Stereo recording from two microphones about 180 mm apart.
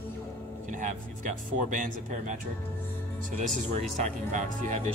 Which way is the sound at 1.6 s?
45° right (ahead or behind).